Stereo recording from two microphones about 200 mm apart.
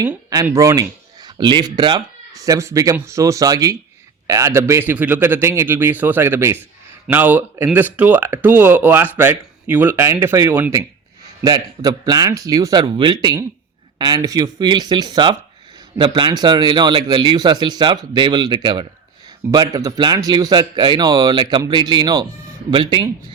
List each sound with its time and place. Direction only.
0.1 s speech: 10° right (ahead or behind)